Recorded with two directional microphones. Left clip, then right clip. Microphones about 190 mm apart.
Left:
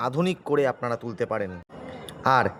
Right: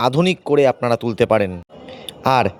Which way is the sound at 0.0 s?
30° right (ahead or behind).